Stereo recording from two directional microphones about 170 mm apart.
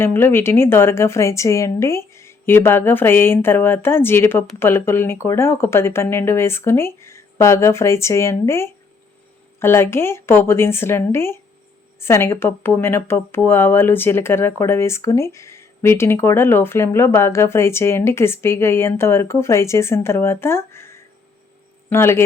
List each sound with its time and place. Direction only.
0.0 s a man's voice: 15° left (ahead or behind)